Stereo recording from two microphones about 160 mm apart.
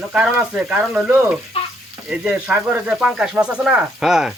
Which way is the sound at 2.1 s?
5° right (ahead or behind).